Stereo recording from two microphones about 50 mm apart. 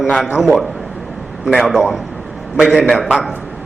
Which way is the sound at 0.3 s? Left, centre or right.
Centre.